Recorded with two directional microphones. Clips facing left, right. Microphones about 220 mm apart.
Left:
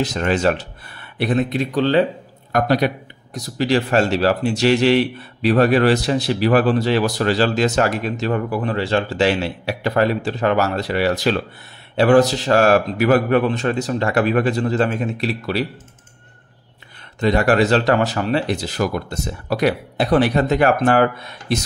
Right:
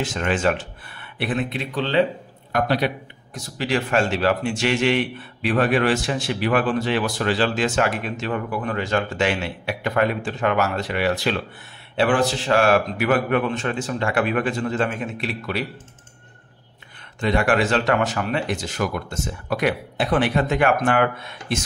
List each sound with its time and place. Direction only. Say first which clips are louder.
0.0 s a man's voice: left 4 dB; 40° left (ahead or behind)
17.2 s a man's voice: left 4 dB; 40° left (ahead or behind)